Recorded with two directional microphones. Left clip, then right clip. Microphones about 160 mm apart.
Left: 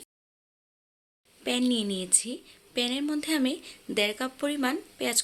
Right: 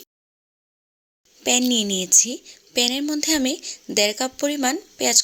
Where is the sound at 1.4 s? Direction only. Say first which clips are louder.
Right 8 dB; 40° right (ahead or behind).